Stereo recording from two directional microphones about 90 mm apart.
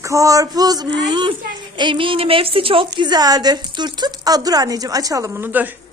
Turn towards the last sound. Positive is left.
turn(degrees=-20)  # may be behind; listen again after turning